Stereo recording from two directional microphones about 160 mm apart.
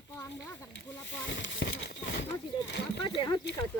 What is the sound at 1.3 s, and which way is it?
Speech, 90° left.